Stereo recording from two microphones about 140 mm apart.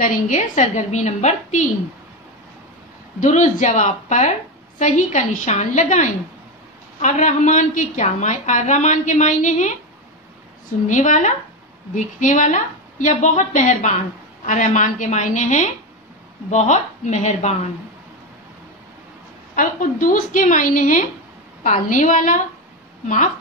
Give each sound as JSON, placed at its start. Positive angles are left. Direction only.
{"t": 0.0, "sound": "a woman's voice", "side_deg": 65}
{"t": 3.2, "sound": "a woman's voice", "side_deg": 65}
{"t": 10.9, "sound": "a woman's voice", "side_deg": 60}
{"t": 19.5, "sound": "a woman's voice", "side_deg": 75}